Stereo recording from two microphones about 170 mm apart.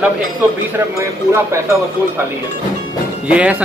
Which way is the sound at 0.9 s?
15° right (ahead or behind).